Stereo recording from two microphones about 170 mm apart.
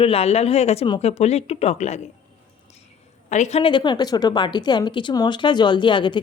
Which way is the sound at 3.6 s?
30° left (ahead or behind).